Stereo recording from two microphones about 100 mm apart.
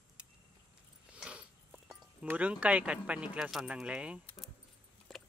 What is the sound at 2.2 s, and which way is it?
Speech, 15° right (ahead or behind).